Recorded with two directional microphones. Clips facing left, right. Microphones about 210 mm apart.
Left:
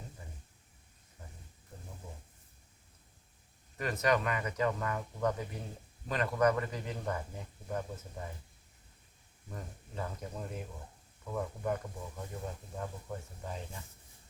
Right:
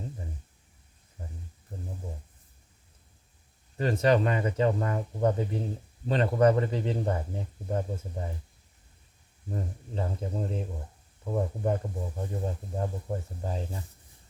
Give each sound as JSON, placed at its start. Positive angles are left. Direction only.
{"t": 3.8, "sound": "a man's voice", "side_deg": -30}
{"t": 9.5, "sound": "a man's voice", "side_deg": -30}